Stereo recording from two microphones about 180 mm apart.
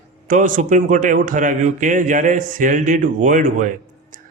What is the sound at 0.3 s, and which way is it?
Speech, 45° right (ahead or behind).